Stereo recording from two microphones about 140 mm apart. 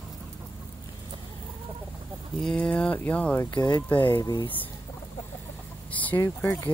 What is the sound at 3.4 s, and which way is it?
Speech, 30° left (ahead or behind).